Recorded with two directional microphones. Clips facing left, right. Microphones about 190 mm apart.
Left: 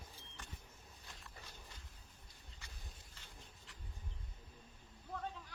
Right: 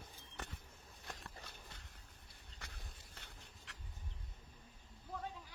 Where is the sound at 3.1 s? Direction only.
70° right (ahead or behind).